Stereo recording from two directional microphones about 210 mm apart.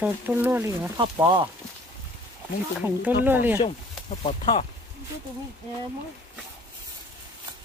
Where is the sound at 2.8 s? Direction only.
10° right (ahead or behind).